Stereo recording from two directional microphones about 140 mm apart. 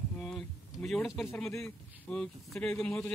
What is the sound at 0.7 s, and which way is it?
Speech, 5° left (ahead or behind).